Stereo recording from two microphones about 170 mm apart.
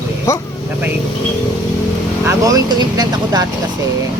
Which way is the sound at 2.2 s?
20° right (ahead or behind).